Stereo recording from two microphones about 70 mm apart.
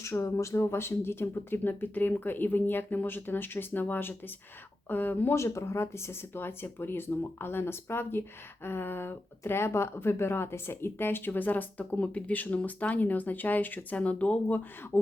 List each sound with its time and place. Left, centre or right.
0.0 s speech: left
5.3 s speech: left; by 14.6 s centre